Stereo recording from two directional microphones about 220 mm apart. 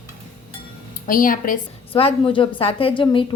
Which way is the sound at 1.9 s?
25° left (ahead or behind).